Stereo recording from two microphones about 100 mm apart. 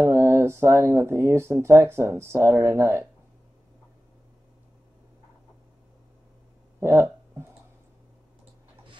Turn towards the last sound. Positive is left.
turn(degrees=-25)  # may be behind; listen again after turning